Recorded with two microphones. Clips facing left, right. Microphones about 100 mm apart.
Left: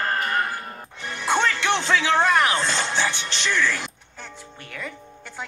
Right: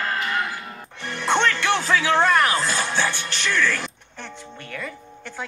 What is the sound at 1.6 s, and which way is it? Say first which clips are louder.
Music: right 1 dB; 25° left (ahead or behind).